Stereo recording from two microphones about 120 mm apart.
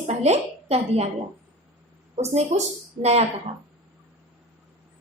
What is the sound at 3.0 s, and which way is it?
Speech, 60° right (ahead or behind).